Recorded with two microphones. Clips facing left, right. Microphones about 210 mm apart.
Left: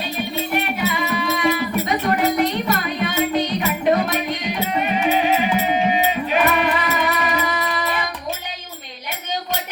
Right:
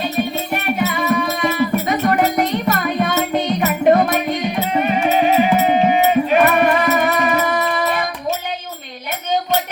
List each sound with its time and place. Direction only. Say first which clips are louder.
0.5 s music: right 3 dB; 45° right (ahead or behind)